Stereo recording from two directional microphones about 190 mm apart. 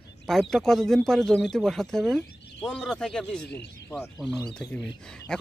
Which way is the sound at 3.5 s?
60° left (ahead or behind).